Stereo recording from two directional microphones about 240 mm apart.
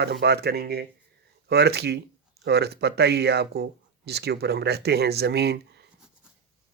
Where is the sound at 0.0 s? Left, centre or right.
Right.